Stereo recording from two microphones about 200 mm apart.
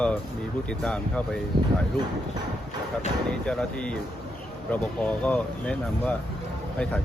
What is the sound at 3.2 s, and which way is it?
Speech, 5° left (ahead or behind).